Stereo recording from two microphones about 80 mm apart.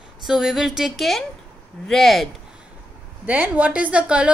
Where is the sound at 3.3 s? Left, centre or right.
Centre.